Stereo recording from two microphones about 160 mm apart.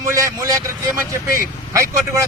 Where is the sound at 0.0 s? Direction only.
20° right (ahead or behind).